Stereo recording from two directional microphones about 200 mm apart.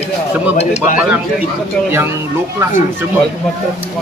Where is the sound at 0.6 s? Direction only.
35° left (ahead or behind).